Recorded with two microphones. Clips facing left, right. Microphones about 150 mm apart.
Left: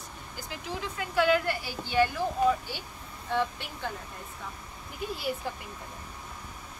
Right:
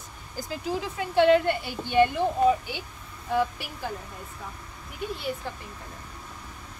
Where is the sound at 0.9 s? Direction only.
25° right (ahead or behind); by 3.9 s 10° right (ahead or behind).